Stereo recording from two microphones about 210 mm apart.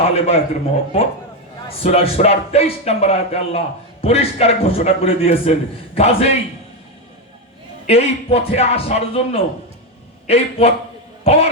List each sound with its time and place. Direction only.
0.1 s a man's voice: 30° left (ahead or behind)
1.8 s a man's voice: 30° left (ahead or behind)
7.9 s a man's voice: 30° left (ahead or behind)